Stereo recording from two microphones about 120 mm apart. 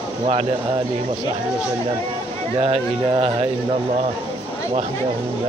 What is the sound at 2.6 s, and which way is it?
Speech, 55° right (ahead or behind).